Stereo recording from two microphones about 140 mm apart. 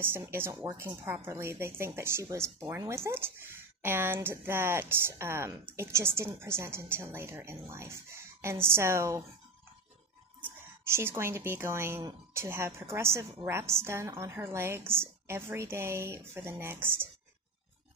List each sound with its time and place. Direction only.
0.0 s a woman's voice: 15° right (ahead or behind)
10.4 s a woman's voice: 15° right (ahead or behind)